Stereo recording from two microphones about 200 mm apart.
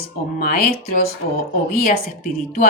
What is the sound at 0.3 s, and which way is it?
A woman's voice, 50° left (ahead or behind).